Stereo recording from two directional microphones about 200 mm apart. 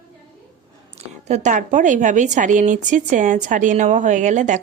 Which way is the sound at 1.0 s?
35° right (ahead or behind).